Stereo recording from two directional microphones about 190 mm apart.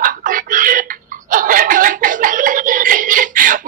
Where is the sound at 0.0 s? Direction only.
45° right (ahead or behind).